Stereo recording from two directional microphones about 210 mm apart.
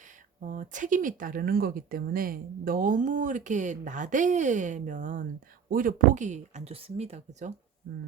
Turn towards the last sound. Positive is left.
turn(degrees=-35)  # may be behind; listen again after turning